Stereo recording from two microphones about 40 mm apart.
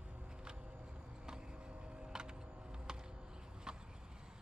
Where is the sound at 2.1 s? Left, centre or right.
Centre.